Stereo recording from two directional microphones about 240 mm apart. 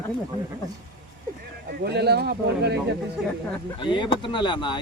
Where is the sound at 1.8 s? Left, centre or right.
Right.